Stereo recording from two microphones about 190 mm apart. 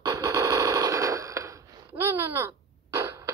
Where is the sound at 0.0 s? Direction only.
20° right (ahead or behind).